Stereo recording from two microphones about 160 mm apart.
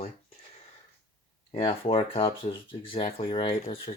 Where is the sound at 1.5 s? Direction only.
35° left (ahead or behind).